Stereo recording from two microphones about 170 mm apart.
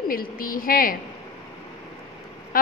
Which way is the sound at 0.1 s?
55° left (ahead or behind).